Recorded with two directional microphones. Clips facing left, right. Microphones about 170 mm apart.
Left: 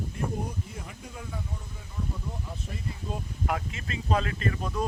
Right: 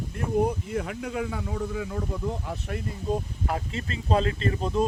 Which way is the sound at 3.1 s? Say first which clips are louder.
Right 4 dB; 35° right (ahead or behind).